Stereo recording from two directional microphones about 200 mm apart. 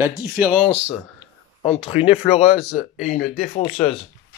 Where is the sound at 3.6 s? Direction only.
30° left (ahead or behind).